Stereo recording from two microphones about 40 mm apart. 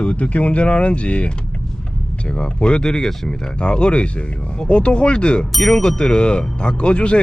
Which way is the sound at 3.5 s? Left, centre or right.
Left.